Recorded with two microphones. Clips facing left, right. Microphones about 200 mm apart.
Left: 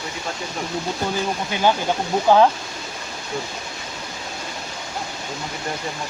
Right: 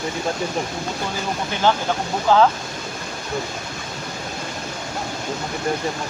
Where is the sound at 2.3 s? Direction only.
15° left (ahead or behind).